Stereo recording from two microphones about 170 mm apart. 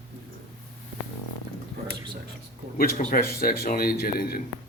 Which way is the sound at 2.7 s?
55° left (ahead or behind).